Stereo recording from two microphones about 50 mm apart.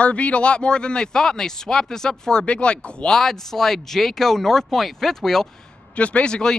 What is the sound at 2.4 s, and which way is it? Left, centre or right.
Speech, left.